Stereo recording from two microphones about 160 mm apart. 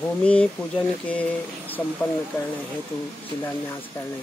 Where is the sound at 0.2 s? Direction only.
5° left (ahead or behind).